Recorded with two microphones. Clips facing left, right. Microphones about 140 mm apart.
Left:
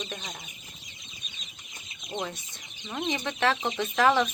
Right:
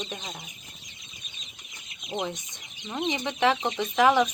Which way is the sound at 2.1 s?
10° right (ahead or behind).